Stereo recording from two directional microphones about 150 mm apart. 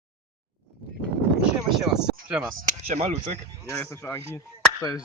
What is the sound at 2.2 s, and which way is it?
Speech, centre (ahead or behind).